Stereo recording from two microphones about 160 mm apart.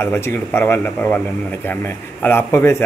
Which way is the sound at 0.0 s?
15° left (ahead or behind).